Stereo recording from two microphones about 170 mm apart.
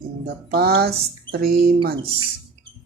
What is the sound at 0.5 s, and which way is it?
Speech, 70° right (ahead or behind).